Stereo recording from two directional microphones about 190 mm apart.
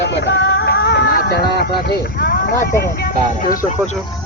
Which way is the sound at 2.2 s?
50° left (ahead or behind).